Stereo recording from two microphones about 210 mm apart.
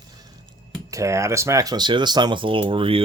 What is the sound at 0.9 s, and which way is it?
Speech, 15° right (ahead or behind).